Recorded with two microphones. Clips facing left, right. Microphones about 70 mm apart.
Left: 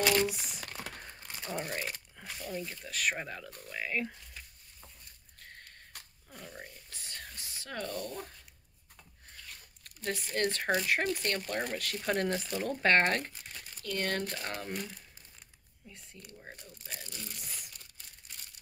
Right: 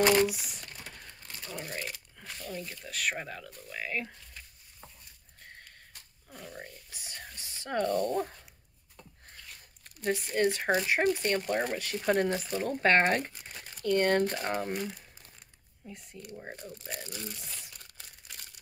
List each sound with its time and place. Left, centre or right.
0.3 s speech: centre
1.0 s crumpling: left
2.1 s speech: centre
6.3 s speech: centre
6.9 s whispering: centre
7.7 s speech: right
9.8 s speech: centre
13.8 s speech: right
15.9 s speech: centre
16.3 s speech: right
18.3 s crumpling: right